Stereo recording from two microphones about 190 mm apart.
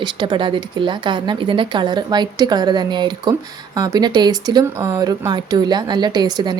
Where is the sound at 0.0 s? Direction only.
25° right (ahead or behind).